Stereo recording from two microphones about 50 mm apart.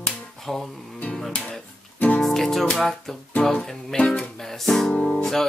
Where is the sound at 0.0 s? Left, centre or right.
Centre.